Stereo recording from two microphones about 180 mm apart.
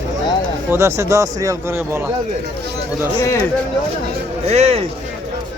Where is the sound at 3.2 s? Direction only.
15° left (ahead or behind).